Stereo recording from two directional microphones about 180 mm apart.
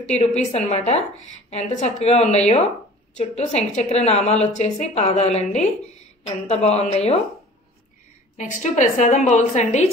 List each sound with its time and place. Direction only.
0.0 s a woman's voice: 40° left (ahead or behind)
8.4 s a woman's voice: 45° left (ahead or behind)